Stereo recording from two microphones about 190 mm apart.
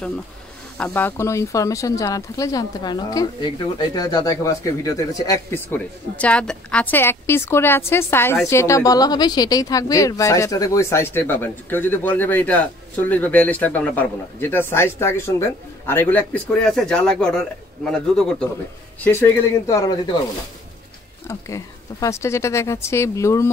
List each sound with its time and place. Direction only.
0.7 s speech: 10° left (ahead or behind)
21.3 s speech: 15° left (ahead or behind)